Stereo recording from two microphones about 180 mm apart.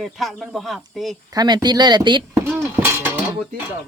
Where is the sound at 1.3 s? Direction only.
25° right (ahead or behind).